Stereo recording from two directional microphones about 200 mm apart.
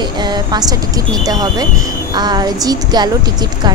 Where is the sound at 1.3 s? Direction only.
20° right (ahead or behind).